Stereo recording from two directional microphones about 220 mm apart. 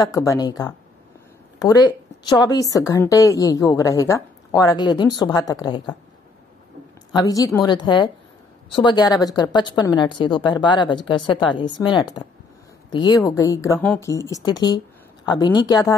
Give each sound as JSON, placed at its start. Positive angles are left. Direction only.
{"t": 0.0, "sound": "speech", "side_deg": 15}
{"t": 7.1, "sound": "a woman's voice", "side_deg": 15}